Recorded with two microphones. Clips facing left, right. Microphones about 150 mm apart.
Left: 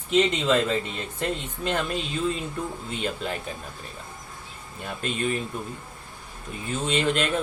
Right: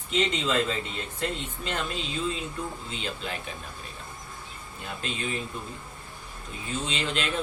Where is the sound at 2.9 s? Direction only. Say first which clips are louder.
Left 5 dB; 50° left (ahead or behind).